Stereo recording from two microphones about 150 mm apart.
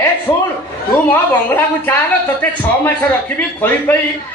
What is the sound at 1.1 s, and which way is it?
A man's voice, 15° left (ahead or behind).